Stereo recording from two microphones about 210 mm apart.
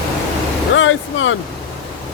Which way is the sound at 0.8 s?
70° left (ahead or behind).